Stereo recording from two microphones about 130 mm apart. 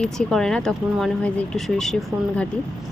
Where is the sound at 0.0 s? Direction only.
5° left (ahead or behind).